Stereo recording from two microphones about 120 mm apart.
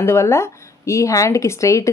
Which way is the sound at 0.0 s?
20° left (ahead or behind).